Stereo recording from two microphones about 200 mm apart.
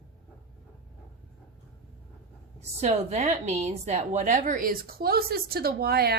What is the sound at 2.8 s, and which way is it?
A woman's voice, 35° right (ahead or behind).